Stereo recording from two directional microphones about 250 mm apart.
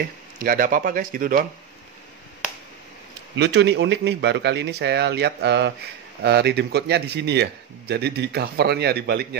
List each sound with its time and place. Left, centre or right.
0.4 s a man's voice: right
3.3 s a man's voice: right